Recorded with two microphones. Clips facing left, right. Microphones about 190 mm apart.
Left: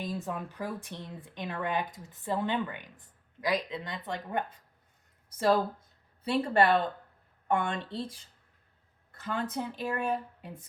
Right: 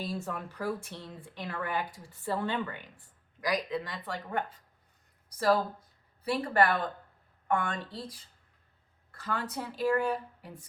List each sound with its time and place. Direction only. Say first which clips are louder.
0.0 s speech: left 1 dB; 15° left (ahead or behind)
6.2 s speech: left 2 dB; 25° left (ahead or behind)